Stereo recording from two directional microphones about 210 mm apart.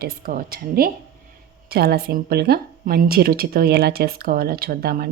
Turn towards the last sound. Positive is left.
turn(degrees=-45)  # may be behind; listen again after turning